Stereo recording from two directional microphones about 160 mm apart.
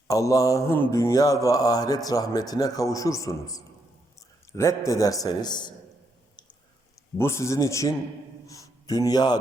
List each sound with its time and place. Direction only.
0.1 s speech: 20° left (ahead or behind)
7.2 s speech: 15° left (ahead or behind)
8.4 s a sound: 20° left (ahead or behind)